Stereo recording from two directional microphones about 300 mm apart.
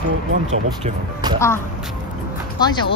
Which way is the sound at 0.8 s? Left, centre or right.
Centre.